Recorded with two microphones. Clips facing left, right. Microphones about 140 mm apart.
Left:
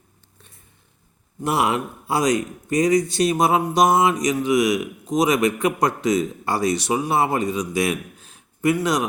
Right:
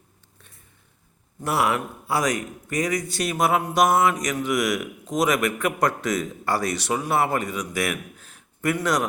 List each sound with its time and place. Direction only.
1.4 s speech: 20° left (ahead or behind)